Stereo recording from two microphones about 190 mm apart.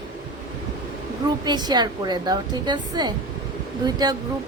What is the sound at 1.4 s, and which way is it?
A woman's voice, 20° right (ahead or behind).